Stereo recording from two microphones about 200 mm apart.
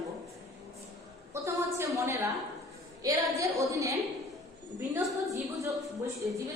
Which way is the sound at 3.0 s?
15° right (ahead or behind).